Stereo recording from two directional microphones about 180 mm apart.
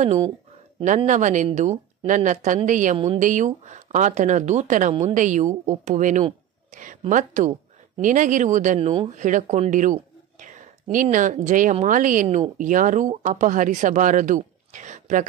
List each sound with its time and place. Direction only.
0.8 s speech: 45° right (ahead or behind)
6.7 s a sound: 45° right (ahead or behind)
7.0 s speech: 45° right (ahead or behind)
9.1 s speech: 45° right (ahead or behind)